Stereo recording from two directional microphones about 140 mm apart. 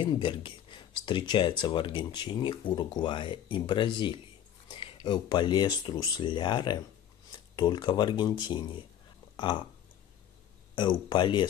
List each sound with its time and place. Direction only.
0.0 s speech: 35° left (ahead or behind)
10.7 s speech: 35° left (ahead or behind)